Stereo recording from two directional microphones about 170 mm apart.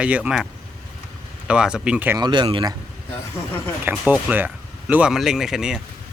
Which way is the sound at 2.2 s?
25° right (ahead or behind).